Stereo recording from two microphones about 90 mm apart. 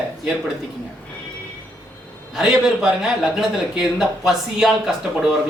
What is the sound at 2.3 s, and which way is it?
Speech, 5° right (ahead or behind).